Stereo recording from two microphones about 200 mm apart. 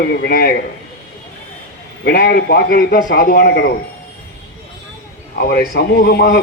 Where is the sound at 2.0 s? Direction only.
50° left (ahead or behind).